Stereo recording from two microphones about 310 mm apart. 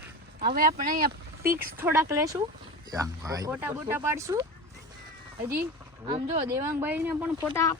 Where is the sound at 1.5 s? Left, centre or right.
Centre.